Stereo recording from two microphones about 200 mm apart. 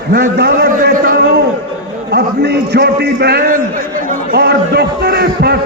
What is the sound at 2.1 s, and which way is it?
A man's voice, 55° right (ahead or behind).